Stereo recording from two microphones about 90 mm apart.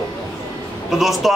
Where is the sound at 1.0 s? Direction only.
Centre (ahead or behind).